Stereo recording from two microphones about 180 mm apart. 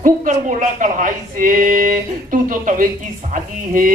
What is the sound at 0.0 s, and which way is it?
Speech, 45° right (ahead or behind).